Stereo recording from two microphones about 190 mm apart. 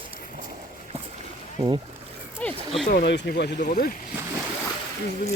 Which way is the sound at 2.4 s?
5° left (ahead or behind).